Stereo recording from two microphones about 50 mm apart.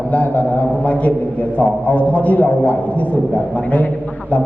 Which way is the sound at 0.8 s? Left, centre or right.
Left.